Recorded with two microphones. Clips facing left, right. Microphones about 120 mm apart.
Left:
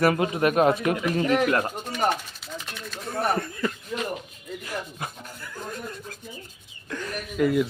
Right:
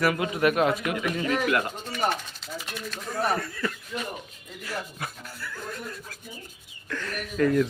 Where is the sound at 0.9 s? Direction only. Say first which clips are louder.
Left 4 dB; 40° left (ahead or behind).